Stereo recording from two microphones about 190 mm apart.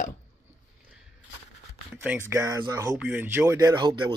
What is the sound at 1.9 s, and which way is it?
Speech, 10° right (ahead or behind).